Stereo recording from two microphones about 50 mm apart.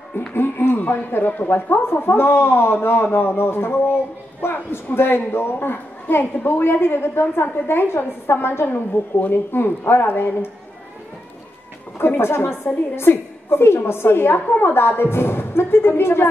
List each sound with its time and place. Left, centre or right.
0.3 s a woman's voice: left
12.0 s a woman's voice: left